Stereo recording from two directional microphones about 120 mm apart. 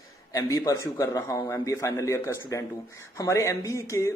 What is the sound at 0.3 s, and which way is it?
Speech, 25° left (ahead or behind).